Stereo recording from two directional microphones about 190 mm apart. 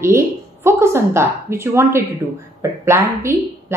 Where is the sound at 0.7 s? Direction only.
15° right (ahead or behind).